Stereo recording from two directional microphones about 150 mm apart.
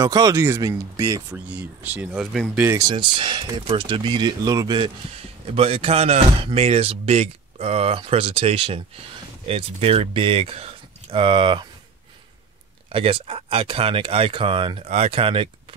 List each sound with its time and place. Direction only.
0.0 s speech: 25° right (ahead or behind)
1.3 s speech: 10° right (ahead or behind)
2.9 s speech: 30° right (ahead or behind)
5.5 s speech: 40° right (ahead or behind)
12.9 s speech: 40° right (ahead or behind)